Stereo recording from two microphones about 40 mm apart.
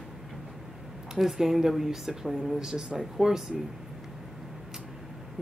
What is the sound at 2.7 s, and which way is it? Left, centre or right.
Speech, right.